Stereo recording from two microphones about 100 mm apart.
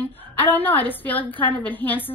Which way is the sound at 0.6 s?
15° left (ahead or behind).